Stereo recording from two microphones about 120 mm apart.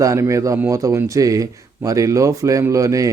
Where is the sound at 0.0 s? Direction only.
25° right (ahead or behind).